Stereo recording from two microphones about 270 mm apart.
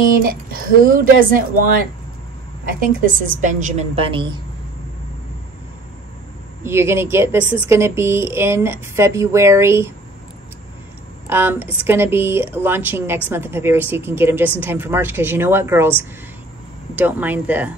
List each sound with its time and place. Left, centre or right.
0.2 s a woman's voice: right
6.6 s speech: centre
11.2 s speech: centre
16.9 s speech: centre